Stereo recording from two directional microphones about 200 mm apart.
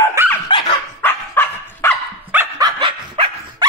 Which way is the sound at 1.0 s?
10° left (ahead or behind).